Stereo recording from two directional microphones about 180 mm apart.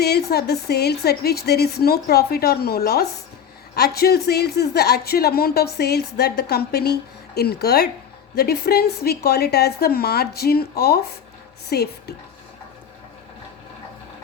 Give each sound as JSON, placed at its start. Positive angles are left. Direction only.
{"t": 0.0, "sound": "a woman's voice", "side_deg": 65}